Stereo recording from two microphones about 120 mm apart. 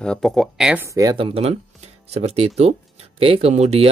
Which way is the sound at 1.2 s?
55° right (ahead or behind).